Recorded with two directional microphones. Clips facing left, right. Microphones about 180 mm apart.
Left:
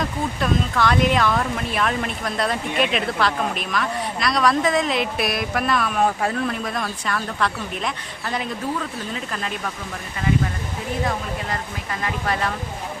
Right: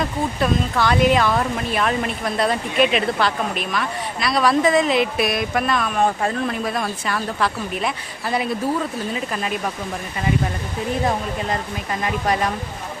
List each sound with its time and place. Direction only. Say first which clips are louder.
0.0 s speech: right 3 dB; centre (ahead or behind)
12.0 s speech: right 3 dB; 15° right (ahead or behind)